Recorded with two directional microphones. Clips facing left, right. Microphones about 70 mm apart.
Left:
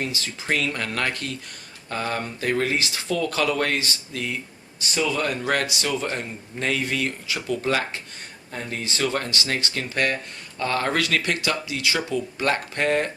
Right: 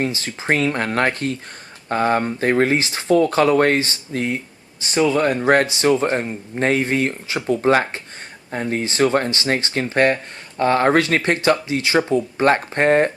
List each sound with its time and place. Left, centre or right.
0.0 s speech: right